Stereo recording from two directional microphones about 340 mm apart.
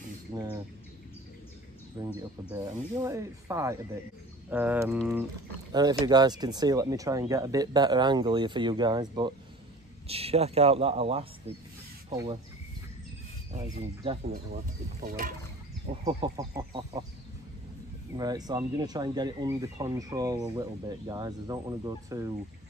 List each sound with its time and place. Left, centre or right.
0.3 s bird: centre
2.0 s speech: centre
13.7 s speech: centre
16.0 s speech: centre
18.1 s speech: centre